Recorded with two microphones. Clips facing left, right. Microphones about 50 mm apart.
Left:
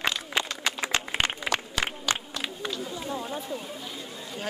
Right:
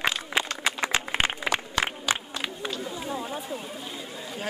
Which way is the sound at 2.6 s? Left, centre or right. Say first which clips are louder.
Right 1 dB; centre.